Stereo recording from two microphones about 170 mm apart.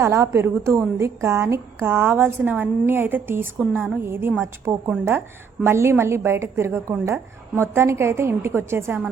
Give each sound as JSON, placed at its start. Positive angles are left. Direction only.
{"t": 0.0, "sound": "a woman's voice", "side_deg": -20}